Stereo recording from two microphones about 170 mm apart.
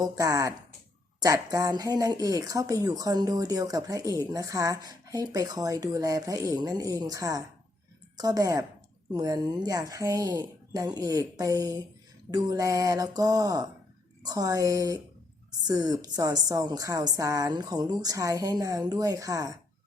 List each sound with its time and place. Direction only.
0.0 s a woman's voice: 20° right (ahead or behind)